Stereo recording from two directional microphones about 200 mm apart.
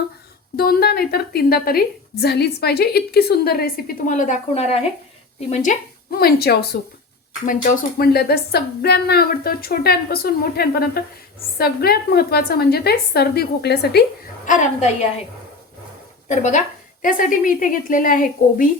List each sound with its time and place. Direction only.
0.5 s a woman's voice: 50° left (ahead or behind); by 4.8 s 30° left (ahead or behind)
5.5 s a woman's voice: 45° left (ahead or behind)
14.4 s a woman's voice: 40° left (ahead or behind)
16.3 s a woman's voice: 35° left (ahead or behind)